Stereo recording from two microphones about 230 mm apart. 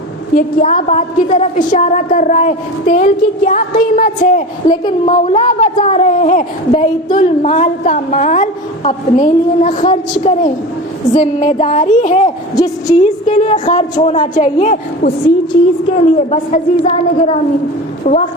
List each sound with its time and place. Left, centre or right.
0.3 s a woman's voice: left
4.6 s a woman's voice: left
5.0 s a woman's voice: left
12.5 s a woman's voice: centre
13.0 s a woman's voice: left